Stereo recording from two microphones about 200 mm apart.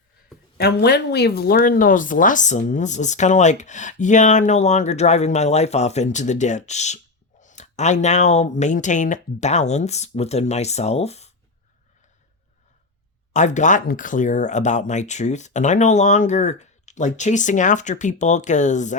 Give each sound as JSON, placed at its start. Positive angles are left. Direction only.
{"t": 0.5, "sound": "speech", "side_deg": 55}
{"t": 13.3, "sound": "speech", "side_deg": 35}